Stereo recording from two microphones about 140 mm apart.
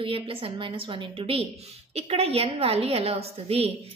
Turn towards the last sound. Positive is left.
turn(degrees=-45)  # may be behind; listen again after turning